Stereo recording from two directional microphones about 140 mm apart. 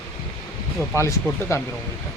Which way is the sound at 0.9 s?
20° left (ahead or behind).